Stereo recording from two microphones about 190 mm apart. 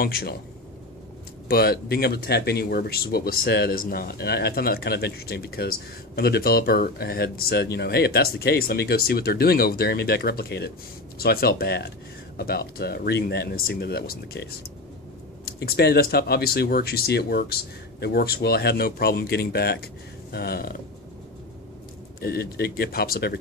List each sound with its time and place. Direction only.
0.0 s speech: 55° left (ahead or behind)
1.5 s speech: 55° left (ahead or behind)
15.4 s speech: 55° left (ahead or behind)
22.2 s speech: 55° left (ahead or behind)